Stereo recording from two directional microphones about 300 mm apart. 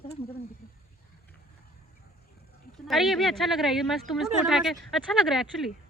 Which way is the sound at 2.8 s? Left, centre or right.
Centre.